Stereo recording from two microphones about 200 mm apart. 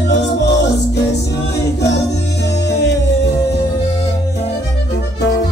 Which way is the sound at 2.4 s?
60° left (ahead or behind).